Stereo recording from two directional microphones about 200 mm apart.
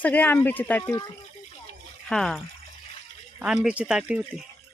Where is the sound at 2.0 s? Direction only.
Centre (ahead or behind).